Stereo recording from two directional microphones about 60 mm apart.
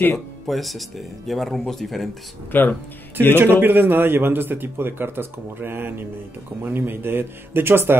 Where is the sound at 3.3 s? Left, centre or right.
Right.